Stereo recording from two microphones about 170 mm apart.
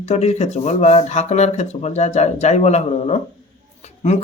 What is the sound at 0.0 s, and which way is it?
Speech, 40° left (ahead or behind).